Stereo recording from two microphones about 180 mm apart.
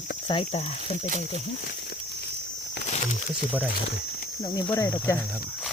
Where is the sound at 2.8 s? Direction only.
40° left (ahead or behind).